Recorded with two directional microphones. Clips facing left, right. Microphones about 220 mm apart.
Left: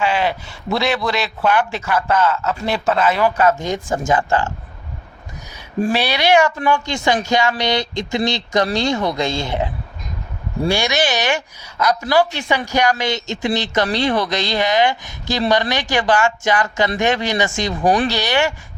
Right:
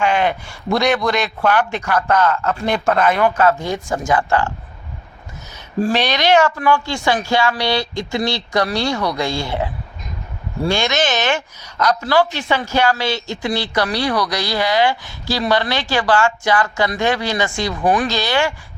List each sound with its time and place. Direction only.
0.0 s a sound: 50° right (ahead or behind)
0.7 s a man's voice: 5° left (ahead or behind); by 4.5 s 20° left (ahead or behind)
5.9 s speech: 10° left (ahead or behind)
17.8 s speech: 30° left (ahead or behind)
18.1 s speech: 15° left (ahead or behind)